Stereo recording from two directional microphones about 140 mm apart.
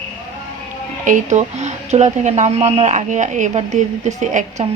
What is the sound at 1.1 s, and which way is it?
Speech, 60° right (ahead or behind).